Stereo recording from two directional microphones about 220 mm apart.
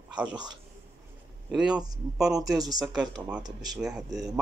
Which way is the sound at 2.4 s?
15° right (ahead or behind).